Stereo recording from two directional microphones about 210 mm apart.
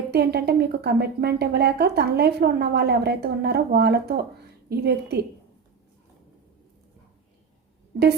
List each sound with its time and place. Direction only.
0.1 s speech: 50° right (ahead or behind)